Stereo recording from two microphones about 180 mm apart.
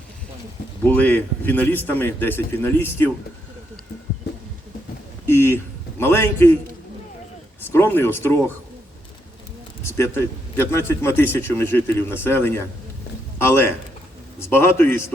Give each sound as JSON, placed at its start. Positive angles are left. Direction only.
{"t": 0.9, "sound": "a man's voice", "side_deg": 10}
{"t": 4.3, "sound": "a sound", "side_deg": 70}
{"t": 5.2, "sound": "a sound", "side_deg": 10}
{"t": 6.0, "sound": "a man's voice", "side_deg": 10}
{"t": 7.7, "sound": "a man's voice", "side_deg": 10}
{"t": 9.8, "sound": "a man's voice", "side_deg": 15}